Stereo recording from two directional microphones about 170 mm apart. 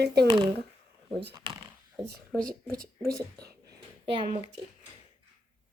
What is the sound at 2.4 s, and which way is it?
Speech, 55° right (ahead or behind).